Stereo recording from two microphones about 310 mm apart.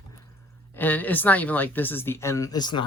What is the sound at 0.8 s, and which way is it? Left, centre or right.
Speech, centre.